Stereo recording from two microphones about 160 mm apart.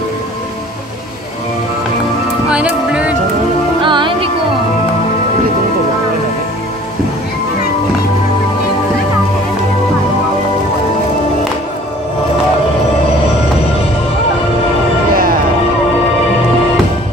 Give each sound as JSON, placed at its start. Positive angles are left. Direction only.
{"t": 2.5, "sound": "music", "side_deg": -5}
{"t": 3.8, "sound": "music", "side_deg": -30}